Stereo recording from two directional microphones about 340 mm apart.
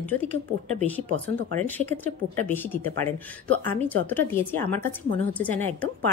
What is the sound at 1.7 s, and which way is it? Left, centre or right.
Speech, centre.